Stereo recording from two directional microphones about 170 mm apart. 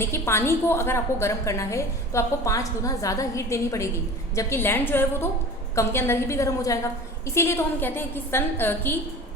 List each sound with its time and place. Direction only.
0.0 s a woman's voice: 15° left (ahead or behind)